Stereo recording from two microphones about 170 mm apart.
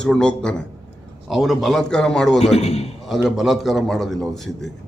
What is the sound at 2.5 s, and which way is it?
Speech, 40° left (ahead or behind).